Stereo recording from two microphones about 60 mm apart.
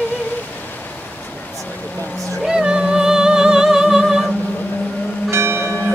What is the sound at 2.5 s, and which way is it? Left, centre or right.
Music, centre.